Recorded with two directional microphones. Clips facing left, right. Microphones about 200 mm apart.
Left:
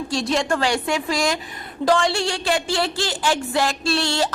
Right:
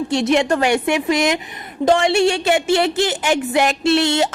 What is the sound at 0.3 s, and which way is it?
A woman's voice, 20° right (ahead or behind).